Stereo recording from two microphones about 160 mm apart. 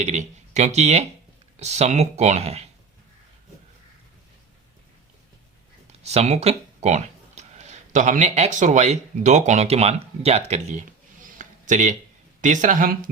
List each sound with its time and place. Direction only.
0.0 s speech: 45° right (ahead or behind)
5.9 s speech: 45° right (ahead or behind); by 13.1 s 60° right (ahead or behind)